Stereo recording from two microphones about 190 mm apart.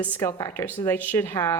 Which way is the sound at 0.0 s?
10° left (ahead or behind).